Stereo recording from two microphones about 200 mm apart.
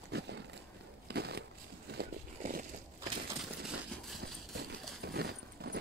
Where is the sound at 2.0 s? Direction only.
45° right (ahead or behind).